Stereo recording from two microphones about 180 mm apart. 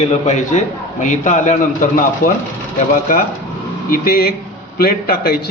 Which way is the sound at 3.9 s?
55° left (ahead or behind).